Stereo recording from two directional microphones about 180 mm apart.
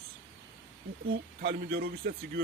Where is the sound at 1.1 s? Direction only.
60° right (ahead or behind).